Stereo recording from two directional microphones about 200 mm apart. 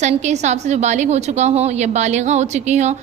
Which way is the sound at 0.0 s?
35° right (ahead or behind).